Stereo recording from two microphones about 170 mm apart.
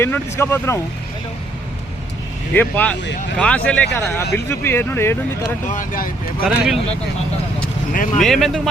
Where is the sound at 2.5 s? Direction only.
10° left (ahead or behind).